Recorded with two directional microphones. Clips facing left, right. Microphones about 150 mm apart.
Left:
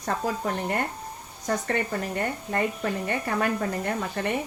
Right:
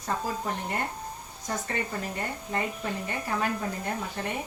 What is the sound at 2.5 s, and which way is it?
Speech, 60° left (ahead or behind).